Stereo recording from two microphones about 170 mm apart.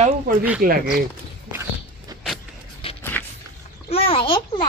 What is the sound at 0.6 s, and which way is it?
Speech, 60° right (ahead or behind).